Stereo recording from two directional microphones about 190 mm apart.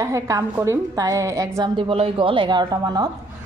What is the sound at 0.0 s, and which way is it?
A woman's voice, 15° right (ahead or behind).